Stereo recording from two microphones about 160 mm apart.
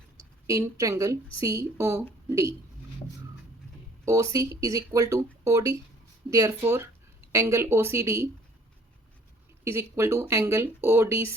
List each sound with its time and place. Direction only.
0.2 s a woman's voice: 20° right (ahead or behind)
4.0 s a woman's voice: 20° right (ahead or behind)
9.6 s speech: 15° right (ahead or behind)